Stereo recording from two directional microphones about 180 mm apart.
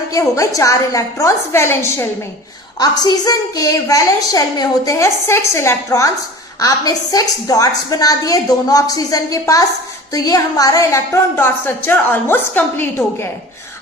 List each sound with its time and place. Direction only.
0.1 s a woman's voice: 20° left (ahead or behind)